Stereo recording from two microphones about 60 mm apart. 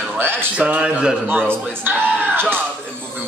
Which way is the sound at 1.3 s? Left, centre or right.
Right.